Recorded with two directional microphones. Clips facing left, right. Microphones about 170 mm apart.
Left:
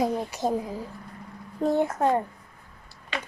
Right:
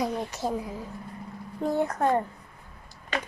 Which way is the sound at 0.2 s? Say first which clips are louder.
Left 3 dB; 15° left (ahead or behind).